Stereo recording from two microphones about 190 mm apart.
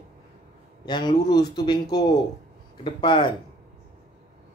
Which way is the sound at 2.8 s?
25° left (ahead or behind).